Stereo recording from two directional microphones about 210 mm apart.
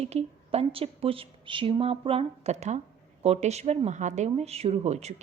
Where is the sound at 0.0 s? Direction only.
30° right (ahead or behind).